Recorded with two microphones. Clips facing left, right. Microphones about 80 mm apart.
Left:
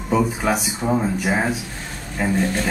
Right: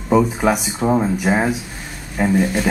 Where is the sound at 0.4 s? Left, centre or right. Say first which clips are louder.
Right 4 dB; centre.